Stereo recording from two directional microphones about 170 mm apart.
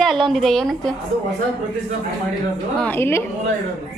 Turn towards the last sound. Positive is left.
turn(degrees=10)  # may be behind; listen again after turning